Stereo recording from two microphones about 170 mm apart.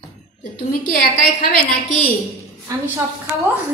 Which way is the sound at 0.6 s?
55° left (ahead or behind).